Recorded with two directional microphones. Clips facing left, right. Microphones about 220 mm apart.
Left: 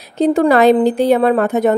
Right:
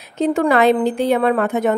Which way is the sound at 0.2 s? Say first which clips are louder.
Left 4 dB; 35° left (ahead or behind).